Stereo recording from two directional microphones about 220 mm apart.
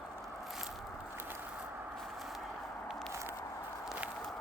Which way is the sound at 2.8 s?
Centre (ahead or behind).